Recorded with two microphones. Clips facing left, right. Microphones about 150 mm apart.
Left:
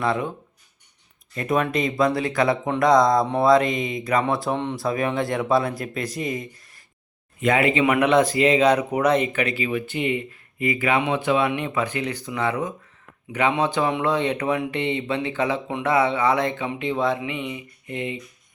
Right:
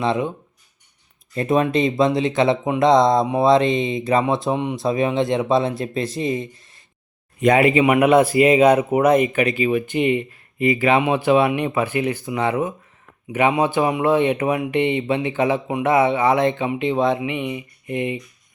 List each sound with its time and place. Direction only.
0.0 s speech: 20° right (ahead or behind)
1.4 s speech: 25° right (ahead or behind)
8.0 s speech: 10° right (ahead or behind)
13.9 s speech: 15° right (ahead or behind)